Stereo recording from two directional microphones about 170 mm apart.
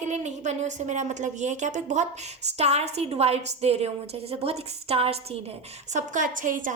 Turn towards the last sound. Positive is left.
turn(degrees=-50)  # may be behind; listen again after turning